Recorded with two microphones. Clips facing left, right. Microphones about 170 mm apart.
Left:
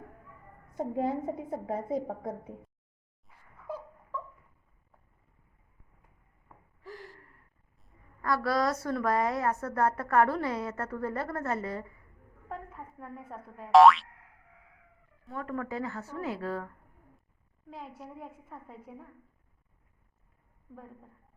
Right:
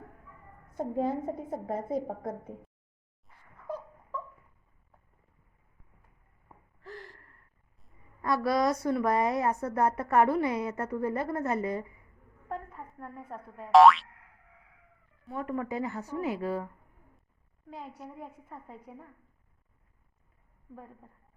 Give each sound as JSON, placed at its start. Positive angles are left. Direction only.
{"t": 0.8, "sound": "a woman's voice", "side_deg": 0}
{"t": 3.2, "sound": "a sound", "side_deg": 5}
{"t": 8.2, "sound": "a woman's voice", "side_deg": -20}
{"t": 12.5, "sound": "speech", "side_deg": 0}
{"t": 15.3, "sound": "a woman's voice", "side_deg": -20}
{"t": 17.7, "sound": "a woman's voice", "side_deg": 0}